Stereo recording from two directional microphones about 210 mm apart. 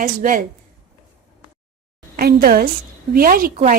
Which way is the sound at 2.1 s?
45° right (ahead or behind).